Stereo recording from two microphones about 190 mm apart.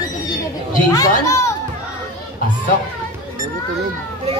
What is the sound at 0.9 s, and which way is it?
Speech, 15° left (ahead or behind).